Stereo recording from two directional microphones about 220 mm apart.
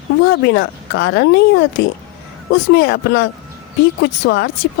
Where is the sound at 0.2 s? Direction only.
45° left (ahead or behind).